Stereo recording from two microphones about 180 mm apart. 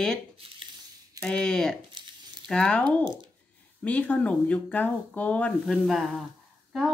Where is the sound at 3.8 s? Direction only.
5° left (ahead or behind).